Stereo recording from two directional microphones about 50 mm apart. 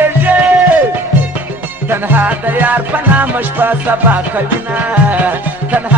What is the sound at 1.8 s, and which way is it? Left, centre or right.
Music, right.